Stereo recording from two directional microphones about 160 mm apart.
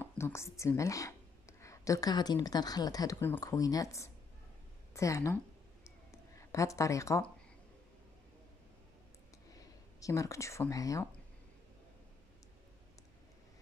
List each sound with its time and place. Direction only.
0.0 s speech: 15° left (ahead or behind)
5.9 s a sound: 20° left (ahead or behind)
9.6 s speech: 20° left (ahead or behind)